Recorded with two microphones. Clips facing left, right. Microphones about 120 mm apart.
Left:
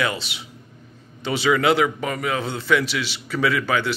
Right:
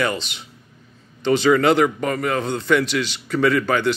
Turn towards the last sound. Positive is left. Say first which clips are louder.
# right 3 dB
turn(degrees=0)  # may be behind; listen again after turning